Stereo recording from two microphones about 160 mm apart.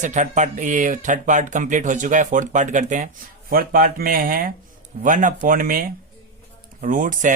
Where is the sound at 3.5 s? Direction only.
65° right (ahead or behind).